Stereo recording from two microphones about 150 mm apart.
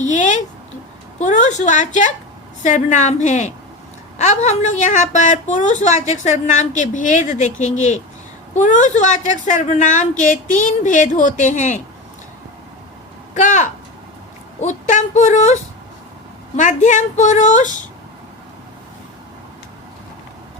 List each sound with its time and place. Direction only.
0.0 s a sound: 55° left (ahead or behind)
1.2 s a woman's voice: 55° left (ahead or behind)
13.3 s a woman's voice: 55° left (ahead or behind)